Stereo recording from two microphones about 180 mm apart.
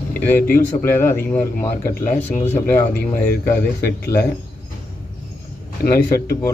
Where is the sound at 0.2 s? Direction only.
10° left (ahead or behind).